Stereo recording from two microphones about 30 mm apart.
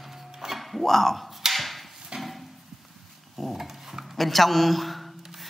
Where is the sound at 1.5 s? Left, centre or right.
Centre.